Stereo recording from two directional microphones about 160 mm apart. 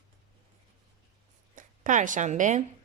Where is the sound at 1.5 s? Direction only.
55° right (ahead or behind).